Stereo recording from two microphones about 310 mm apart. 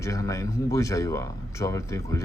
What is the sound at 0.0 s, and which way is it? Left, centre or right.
Speech, centre.